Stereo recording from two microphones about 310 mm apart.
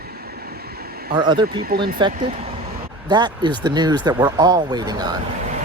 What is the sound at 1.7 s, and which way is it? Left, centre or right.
Speech, right.